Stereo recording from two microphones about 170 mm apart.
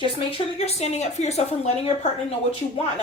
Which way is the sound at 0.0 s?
35° left (ahead or behind).